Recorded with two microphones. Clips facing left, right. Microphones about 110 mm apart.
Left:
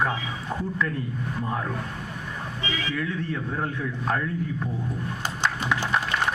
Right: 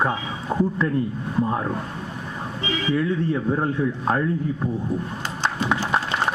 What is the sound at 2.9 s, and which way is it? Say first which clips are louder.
A man's voice: right 10 dB; 30° right (ahead or behind).